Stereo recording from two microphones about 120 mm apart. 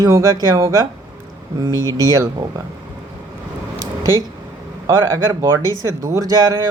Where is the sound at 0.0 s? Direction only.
30° right (ahead or behind).